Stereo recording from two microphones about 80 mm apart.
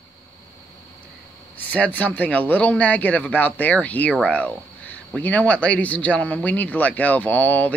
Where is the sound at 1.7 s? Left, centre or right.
Centre.